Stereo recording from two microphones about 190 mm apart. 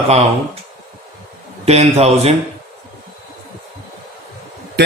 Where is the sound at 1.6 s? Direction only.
35° right (ahead or behind).